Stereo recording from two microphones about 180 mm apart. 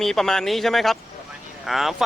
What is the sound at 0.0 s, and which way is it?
Speech, centre (ahead or behind).